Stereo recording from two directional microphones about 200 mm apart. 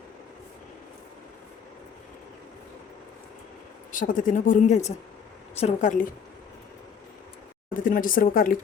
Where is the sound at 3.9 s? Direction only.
40° left (ahead or behind).